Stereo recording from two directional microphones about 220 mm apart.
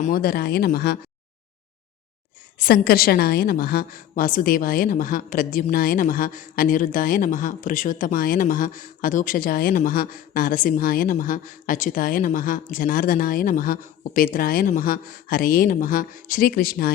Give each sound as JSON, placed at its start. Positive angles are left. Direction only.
{"t": 0.0, "sound": "speech", "side_deg": 40}
{"t": 2.6, "sound": "a woman's voice", "side_deg": 45}